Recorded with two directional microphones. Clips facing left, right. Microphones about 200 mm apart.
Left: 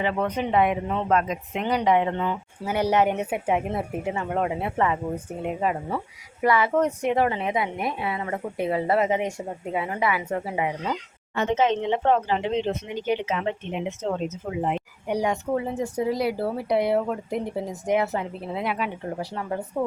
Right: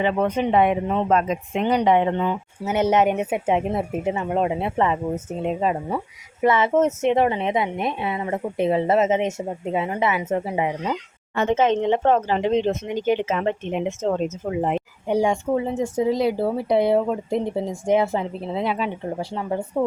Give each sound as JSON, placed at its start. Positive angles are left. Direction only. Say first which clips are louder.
{"t": 0.0, "sound": "speech", "louder": "right 4 dB", "side_deg": -25}
{"t": 11.3, "sound": "speech", "louder": "right 3 dB", "side_deg": -50}
{"t": 15.0, "sound": "speech", "louder": "right 4 dB", "side_deg": -25}